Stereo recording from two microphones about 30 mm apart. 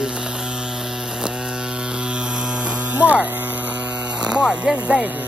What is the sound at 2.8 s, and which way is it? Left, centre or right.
Hum, right.